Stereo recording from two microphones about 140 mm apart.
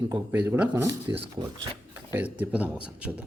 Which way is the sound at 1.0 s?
40° right (ahead or behind).